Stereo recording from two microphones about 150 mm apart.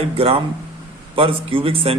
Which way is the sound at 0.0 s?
40° right (ahead or behind).